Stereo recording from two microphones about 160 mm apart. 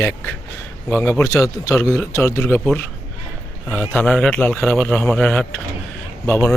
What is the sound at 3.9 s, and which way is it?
A man's voice, 5° left (ahead or behind).